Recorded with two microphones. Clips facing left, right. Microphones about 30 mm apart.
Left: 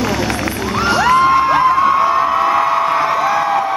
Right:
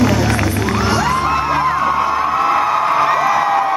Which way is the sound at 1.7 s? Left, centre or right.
Centre.